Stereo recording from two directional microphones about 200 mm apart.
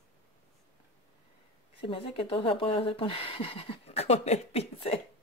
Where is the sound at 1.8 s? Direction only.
25° left (ahead or behind).